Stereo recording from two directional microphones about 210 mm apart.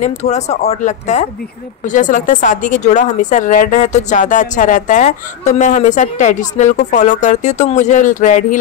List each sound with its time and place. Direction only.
0.0 s speech: 35° left (ahead or behind)